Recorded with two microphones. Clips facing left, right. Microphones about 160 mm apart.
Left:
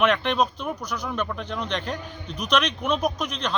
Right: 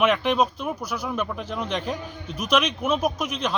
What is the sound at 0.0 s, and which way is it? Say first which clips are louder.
Speech: right 1 dB; 5° right (ahead or behind).